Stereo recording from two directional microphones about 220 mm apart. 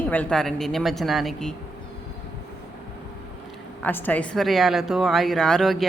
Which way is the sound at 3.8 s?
10° left (ahead or behind).